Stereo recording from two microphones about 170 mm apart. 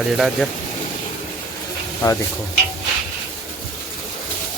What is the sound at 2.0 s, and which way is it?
Speech, 25° left (ahead or behind).